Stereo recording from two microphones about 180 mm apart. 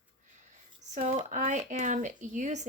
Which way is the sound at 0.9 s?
45° right (ahead or behind).